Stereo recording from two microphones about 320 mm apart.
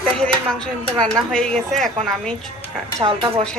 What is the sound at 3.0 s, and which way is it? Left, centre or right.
Speech, centre.